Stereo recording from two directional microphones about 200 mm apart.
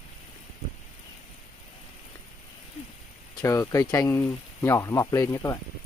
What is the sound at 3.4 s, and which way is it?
Speech, 15° left (ahead or behind).